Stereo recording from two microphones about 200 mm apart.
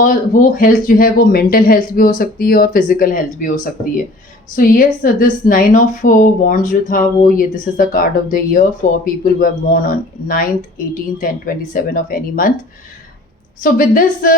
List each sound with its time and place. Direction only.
0.0 s a woman's voice: 40° left (ahead or behind)
13.6 s a woman's voice: 45° left (ahead or behind)